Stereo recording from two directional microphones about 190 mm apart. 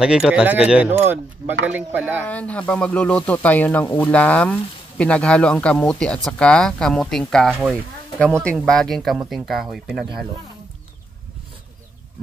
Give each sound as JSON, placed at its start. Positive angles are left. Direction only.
{"t": 0.0, "sound": "speech", "side_deg": -5}
{"t": 2.2, "sound": "speech", "side_deg": 5}